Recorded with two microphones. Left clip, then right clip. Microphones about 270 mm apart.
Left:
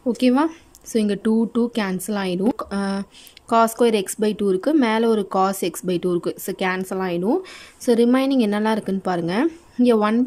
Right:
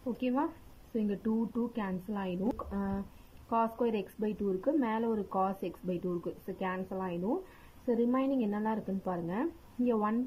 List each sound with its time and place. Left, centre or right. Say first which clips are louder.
0.2 s a woman's voice: left 14 dB; left